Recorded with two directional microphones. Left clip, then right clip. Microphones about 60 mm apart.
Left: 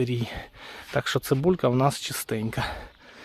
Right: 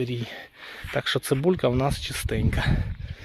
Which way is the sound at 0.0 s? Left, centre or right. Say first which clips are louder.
Left 2 dB; left.